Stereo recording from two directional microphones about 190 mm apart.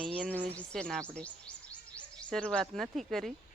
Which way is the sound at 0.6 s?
5° left (ahead or behind).